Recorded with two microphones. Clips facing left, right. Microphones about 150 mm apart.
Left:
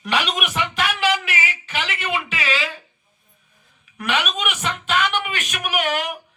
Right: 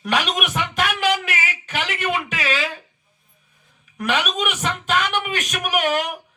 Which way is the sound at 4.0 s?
40° right (ahead or behind).